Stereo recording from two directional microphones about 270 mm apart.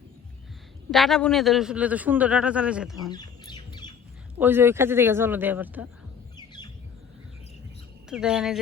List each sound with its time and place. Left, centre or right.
0.9 s a man's voice: centre
3.1 s bird: centre
4.4 s speech: centre
6.3 s squawk: centre
8.1 s a man's voice: centre